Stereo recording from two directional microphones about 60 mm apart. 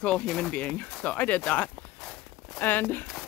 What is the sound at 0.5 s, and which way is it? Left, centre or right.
Speech, left.